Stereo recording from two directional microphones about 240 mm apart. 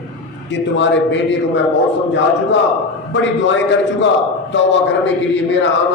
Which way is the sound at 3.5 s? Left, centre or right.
Left.